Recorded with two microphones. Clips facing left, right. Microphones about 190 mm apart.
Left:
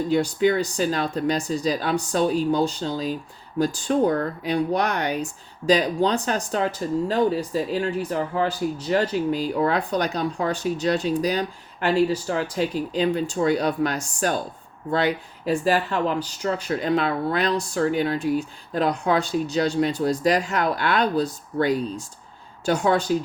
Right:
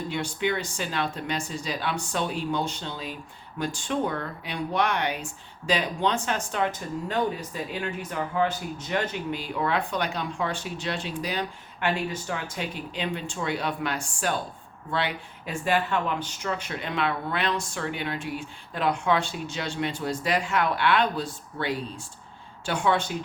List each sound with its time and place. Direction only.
0.1 s speech: 40° left (ahead or behind)